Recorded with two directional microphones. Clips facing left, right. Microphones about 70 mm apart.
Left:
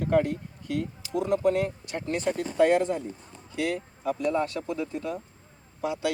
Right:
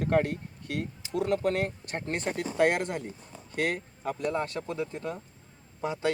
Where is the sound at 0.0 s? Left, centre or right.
Right.